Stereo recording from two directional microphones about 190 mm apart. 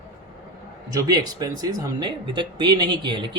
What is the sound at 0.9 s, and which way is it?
Speech, 20° right (ahead or behind).